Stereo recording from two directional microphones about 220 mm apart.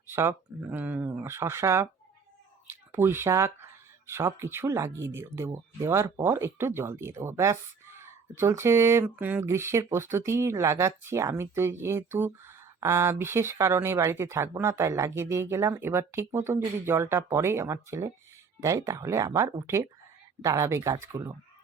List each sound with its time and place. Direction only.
0.1 s speech: 10° right (ahead or behind)